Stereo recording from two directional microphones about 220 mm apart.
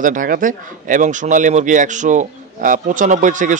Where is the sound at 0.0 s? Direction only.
40° right (ahead or behind).